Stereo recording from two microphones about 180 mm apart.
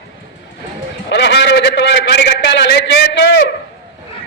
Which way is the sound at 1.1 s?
70° left (ahead or behind).